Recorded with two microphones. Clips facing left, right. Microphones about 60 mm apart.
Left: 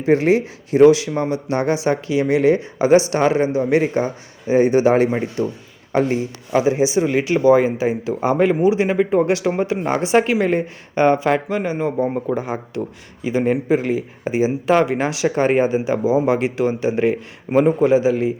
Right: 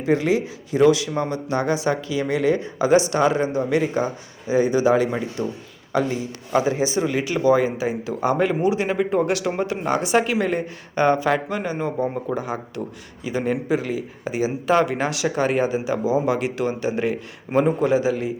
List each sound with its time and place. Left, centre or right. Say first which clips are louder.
0.0 s a man's voice: left 4 dB; left
6.5 s speech: left 4 dB; left